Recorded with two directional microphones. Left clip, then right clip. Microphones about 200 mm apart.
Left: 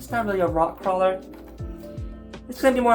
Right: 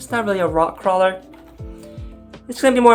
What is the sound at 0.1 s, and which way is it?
Speech, 45° right (ahead or behind).